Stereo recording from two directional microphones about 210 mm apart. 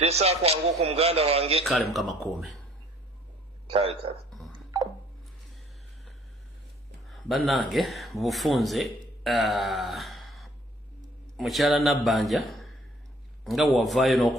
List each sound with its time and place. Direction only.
0.0 s a man's voice: 30° right (ahead or behind)
1.9 s a man's voice: centre (ahead or behind)
3.7 s a man's voice: 25° right (ahead or behind)
7.1 s a man's voice: centre (ahead or behind)